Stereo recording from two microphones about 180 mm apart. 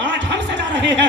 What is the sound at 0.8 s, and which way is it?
Speech, 75° right (ahead or behind).